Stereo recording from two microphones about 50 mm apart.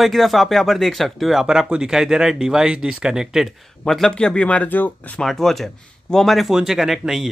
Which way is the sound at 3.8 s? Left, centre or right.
Centre.